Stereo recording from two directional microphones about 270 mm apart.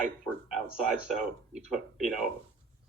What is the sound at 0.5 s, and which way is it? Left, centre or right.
Speech, centre.